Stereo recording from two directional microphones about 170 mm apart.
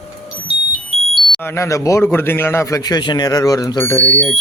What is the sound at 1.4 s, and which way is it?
A man's voice, 15° left (ahead or behind).